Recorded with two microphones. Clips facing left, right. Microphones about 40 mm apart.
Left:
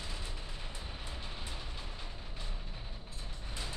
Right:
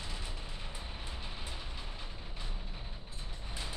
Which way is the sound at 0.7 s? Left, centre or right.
Centre.